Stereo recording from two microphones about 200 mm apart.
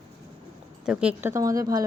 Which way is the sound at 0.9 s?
5° right (ahead or behind).